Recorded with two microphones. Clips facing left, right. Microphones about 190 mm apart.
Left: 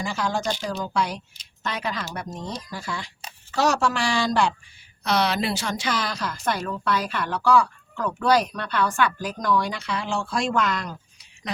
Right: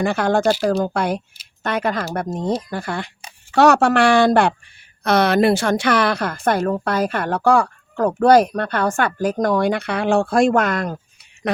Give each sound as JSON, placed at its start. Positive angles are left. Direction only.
{"t": 0.0, "sound": "a woman's voice", "side_deg": -60}